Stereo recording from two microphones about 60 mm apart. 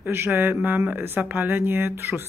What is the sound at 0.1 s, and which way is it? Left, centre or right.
Speech, right.